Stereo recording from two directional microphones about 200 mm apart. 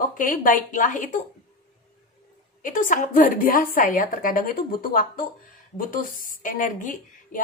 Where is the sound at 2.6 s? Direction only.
40° left (ahead or behind).